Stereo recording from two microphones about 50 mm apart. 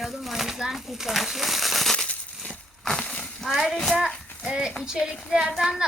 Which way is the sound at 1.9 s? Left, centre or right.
Centre.